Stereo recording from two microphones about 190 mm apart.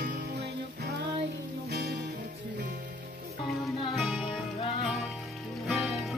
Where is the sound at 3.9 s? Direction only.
Centre (ahead or behind).